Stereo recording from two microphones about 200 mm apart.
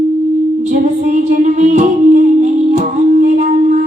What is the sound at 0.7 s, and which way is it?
Music, 40° right (ahead or behind).